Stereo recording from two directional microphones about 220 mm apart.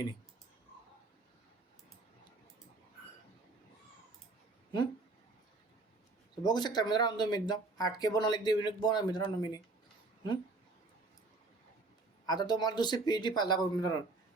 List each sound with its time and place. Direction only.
6.4 s speech: 20° left (ahead or behind)
12.2 s speech: 20° left (ahead or behind)